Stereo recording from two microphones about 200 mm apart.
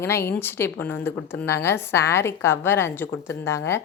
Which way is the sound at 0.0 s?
10° left (ahead or behind).